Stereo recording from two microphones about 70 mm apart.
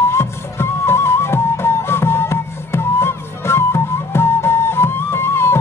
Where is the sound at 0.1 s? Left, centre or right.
Left.